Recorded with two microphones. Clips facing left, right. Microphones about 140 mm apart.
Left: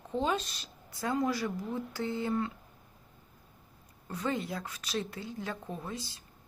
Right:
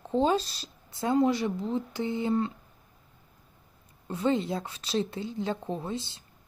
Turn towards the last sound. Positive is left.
turn(degrees=-25)  # may be behind; listen again after turning